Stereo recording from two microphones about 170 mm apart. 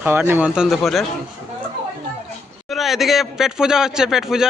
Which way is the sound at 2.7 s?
Centre (ahead or behind).